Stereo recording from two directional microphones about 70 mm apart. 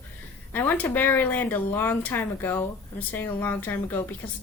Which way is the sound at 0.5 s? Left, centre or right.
Left.